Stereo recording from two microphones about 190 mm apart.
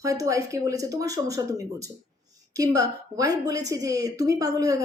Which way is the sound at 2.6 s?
20° right (ahead or behind).